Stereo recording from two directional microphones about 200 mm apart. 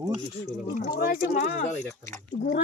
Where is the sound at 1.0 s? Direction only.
50° left (ahead or behind).